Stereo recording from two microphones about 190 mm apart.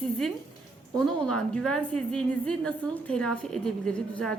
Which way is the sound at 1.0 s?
5° left (ahead or behind).